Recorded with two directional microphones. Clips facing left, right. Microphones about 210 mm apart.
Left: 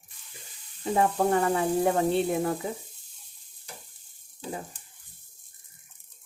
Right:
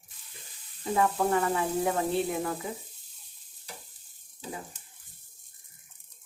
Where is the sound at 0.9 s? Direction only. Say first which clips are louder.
Left 2 dB; 35° left (ahead or behind).